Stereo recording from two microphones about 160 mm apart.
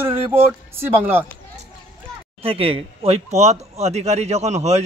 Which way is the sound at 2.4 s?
35° right (ahead or behind).